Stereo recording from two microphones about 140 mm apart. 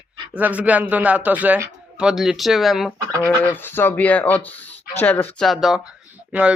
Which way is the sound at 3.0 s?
25° right (ahead or behind).